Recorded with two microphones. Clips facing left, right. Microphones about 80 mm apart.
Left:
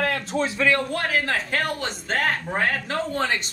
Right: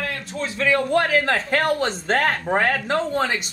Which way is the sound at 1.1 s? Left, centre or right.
Right.